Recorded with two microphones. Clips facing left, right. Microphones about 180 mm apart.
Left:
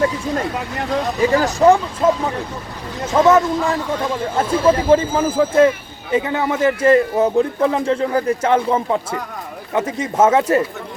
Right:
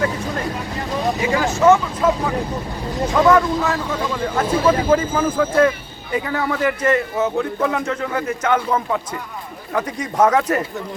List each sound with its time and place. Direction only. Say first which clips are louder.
1.2 s speech: left 3 dB; 35° left (ahead or behind)
3.1 s a man's voice: left 2 dB; 25° left (ahead or behind)